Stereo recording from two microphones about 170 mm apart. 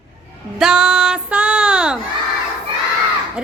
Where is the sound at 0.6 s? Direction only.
5° right (ahead or behind).